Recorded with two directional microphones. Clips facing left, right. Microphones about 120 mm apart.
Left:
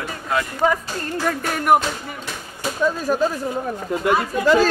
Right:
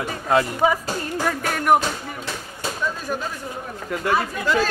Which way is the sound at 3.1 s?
45° left (ahead or behind).